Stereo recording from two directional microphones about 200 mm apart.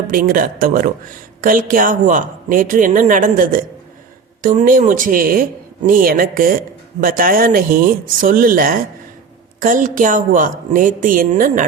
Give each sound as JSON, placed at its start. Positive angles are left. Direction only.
{"t": 0.1, "sound": "a woman's voice", "side_deg": -45}